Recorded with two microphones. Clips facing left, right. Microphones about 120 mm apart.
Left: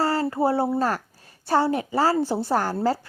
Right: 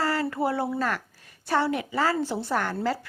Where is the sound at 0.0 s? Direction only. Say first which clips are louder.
Left 4 dB; 30° left (ahead or behind).